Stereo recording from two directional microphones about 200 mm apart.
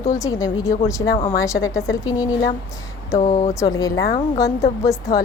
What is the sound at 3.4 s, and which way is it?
Speech, 15° left (ahead or behind).